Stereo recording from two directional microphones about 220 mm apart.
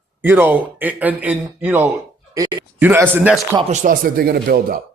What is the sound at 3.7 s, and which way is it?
Speech, 35° right (ahead or behind).